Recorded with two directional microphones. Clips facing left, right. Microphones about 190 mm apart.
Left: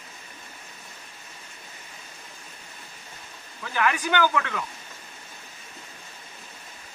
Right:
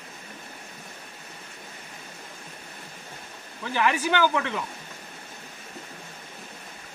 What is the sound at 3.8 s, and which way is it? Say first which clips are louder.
Speech: even; 20° right (ahead or behind).